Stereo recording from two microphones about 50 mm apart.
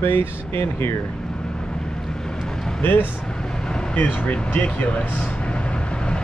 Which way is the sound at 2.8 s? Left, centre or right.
Left.